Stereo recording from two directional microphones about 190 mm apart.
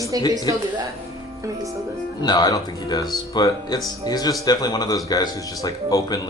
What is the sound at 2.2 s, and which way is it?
Speech, 20° left (ahead or behind).